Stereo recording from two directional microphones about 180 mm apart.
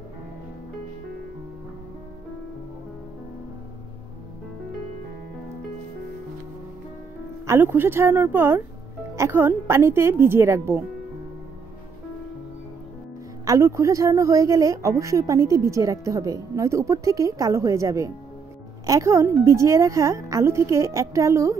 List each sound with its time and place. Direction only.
7.4 s speech: 10° right (ahead or behind)
13.5 s speech: 15° right (ahead or behind)